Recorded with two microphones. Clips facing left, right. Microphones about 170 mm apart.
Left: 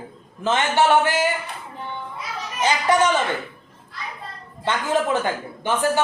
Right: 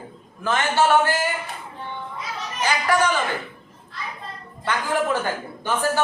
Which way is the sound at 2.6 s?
20° left (ahead or behind).